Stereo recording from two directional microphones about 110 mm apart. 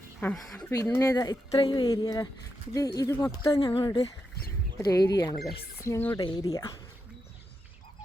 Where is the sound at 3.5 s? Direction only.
55° left (ahead or behind).